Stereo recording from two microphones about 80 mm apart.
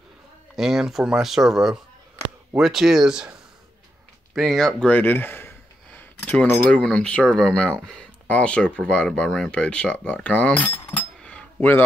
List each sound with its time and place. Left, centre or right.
0.6 s speech: centre
4.4 s speech: centre
5.0 s speech: left
5.9 s a sound: centre
6.7 s speech: centre